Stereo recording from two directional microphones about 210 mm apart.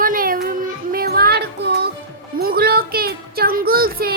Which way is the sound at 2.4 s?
45° right (ahead or behind).